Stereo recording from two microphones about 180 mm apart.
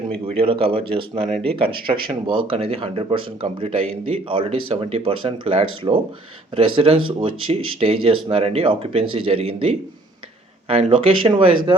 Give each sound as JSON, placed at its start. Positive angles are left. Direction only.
{"t": 0.3, "sound": "speech", "side_deg": -30}